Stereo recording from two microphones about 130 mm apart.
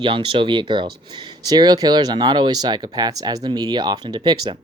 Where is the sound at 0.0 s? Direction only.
40° right (ahead or behind).